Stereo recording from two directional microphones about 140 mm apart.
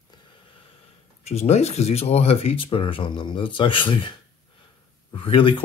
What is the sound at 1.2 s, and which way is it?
Speech, 50° left (ahead or behind).